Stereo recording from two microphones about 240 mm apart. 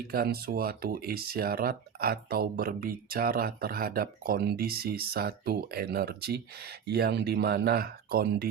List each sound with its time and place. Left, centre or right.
0.1 s speech: right